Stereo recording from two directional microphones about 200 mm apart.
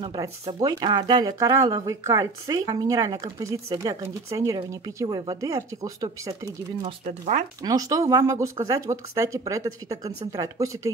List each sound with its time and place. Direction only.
0.0 s speech: 20° right (ahead or behind)
7.1 s speech: 40° right (ahead or behind)
7.6 s speech: 15° right (ahead or behind)